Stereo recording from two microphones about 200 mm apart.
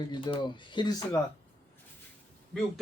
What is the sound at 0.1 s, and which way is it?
A man's voice, 25° left (ahead or behind).